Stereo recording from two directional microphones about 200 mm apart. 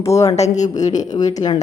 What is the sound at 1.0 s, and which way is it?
Speech, 20° left (ahead or behind).